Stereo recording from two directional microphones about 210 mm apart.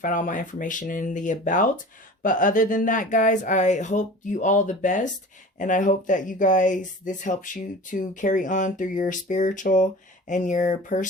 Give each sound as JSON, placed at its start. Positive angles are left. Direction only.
{"t": 0.0, "sound": "speech", "side_deg": 40}